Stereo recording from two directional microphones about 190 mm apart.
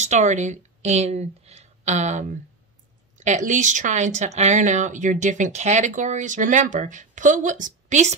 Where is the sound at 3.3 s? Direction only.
40° right (ahead or behind).